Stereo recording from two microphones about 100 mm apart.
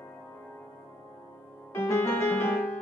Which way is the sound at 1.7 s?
25° left (ahead or behind).